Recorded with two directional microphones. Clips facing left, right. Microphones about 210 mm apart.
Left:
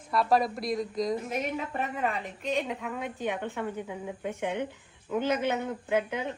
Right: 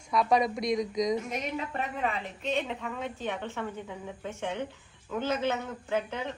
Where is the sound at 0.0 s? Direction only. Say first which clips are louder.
Even; centre (ahead or behind).